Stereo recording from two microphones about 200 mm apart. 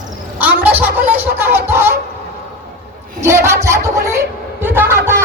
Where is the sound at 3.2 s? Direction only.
15° right (ahead or behind).